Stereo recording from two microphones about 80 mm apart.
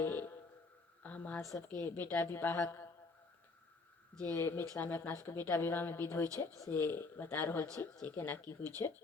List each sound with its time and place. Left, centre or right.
0.0 s music: left
1.0 s speech: centre
1.4 s a woman's voice: left
1.6 s a woman's voice: left
4.2 s a woman's voice: left
8.8 s a woman's voice: left